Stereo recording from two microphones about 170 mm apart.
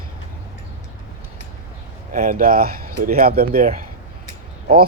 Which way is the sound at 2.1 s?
50° right (ahead or behind).